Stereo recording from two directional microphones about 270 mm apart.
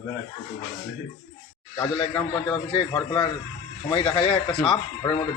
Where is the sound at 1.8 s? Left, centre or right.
Centre.